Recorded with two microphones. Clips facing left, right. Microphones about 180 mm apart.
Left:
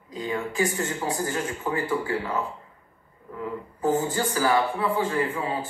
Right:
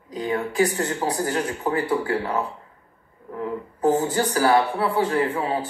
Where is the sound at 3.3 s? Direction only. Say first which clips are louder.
Right 4 dB; 65° right (ahead or behind).